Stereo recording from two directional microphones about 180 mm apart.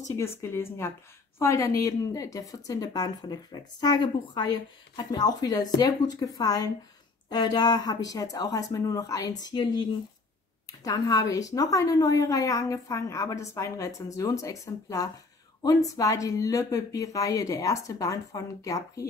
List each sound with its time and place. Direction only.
0.1 s a woman's voice: 15° left (ahead or behind)